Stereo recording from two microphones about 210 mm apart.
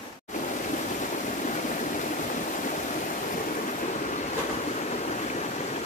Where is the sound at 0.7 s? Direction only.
35° left (ahead or behind).